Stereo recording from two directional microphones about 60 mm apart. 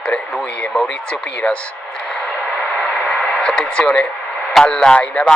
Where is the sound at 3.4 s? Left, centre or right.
Centre.